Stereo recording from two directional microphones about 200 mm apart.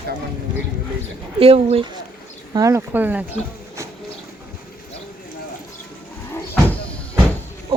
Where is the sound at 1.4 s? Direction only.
30° right (ahead or behind).